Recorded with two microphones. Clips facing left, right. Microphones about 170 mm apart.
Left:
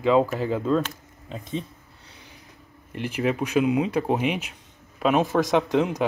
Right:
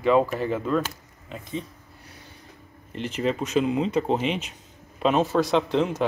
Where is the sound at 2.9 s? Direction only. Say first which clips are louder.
Left 1 dB; 10° left (ahead or behind).